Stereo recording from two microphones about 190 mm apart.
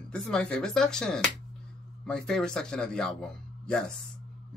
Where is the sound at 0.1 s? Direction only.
5° left (ahead or behind).